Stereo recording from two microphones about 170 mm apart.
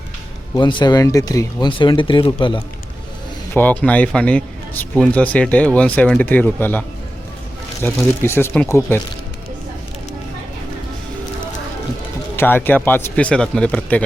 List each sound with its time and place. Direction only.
0.5 s speech: 25° left (ahead or behind)
3.5 s speech: 10° left (ahead or behind)
7.8 s speech: 10° left (ahead or behind)
12.4 s speech: 10° left (ahead or behind)